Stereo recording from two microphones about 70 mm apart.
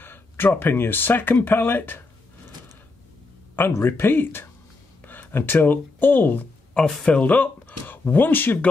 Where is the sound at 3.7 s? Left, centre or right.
Left.